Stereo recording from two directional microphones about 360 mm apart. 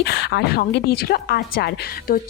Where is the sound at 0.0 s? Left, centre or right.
Left.